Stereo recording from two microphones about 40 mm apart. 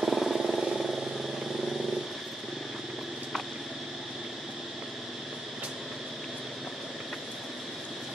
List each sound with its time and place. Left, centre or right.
0.0 s vehicle: centre